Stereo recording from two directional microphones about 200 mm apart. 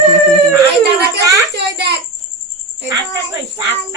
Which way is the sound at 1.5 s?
55° right (ahead or behind).